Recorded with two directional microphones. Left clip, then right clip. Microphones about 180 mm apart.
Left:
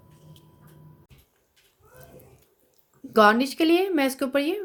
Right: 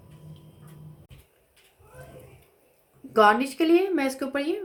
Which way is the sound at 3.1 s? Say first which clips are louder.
Left 1 dB; 45° left (ahead or behind).